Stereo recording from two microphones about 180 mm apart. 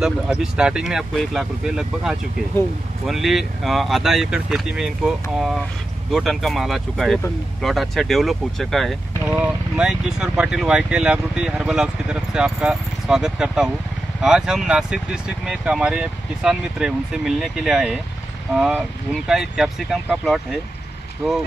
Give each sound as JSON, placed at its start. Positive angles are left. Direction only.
{"t": 0.0, "sound": "speech", "side_deg": -5}